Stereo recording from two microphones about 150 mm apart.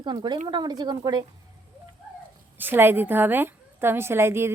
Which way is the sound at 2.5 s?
15° right (ahead or behind).